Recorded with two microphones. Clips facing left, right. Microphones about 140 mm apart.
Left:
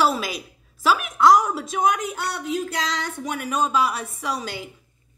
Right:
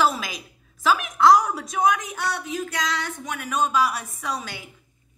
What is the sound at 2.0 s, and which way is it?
Speech, 25° left (ahead or behind).